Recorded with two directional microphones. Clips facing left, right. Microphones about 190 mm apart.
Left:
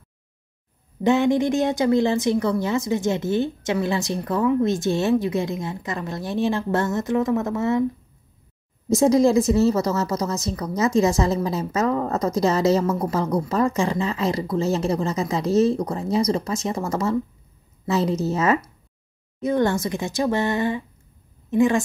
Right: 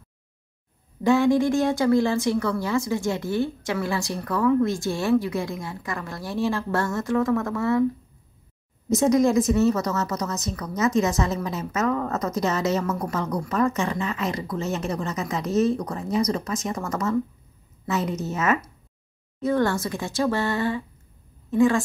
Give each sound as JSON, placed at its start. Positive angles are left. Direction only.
{"t": 1.0, "sound": "a woman's voice", "side_deg": 20}
{"t": 8.8, "sound": "a woman's voice", "side_deg": 30}
{"t": 19.4, "sound": "a woman's voice", "side_deg": 20}